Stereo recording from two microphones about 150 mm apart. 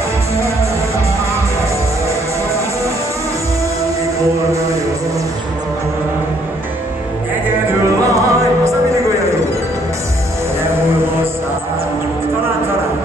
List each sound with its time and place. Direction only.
8.0 s music: 20° right (ahead or behind)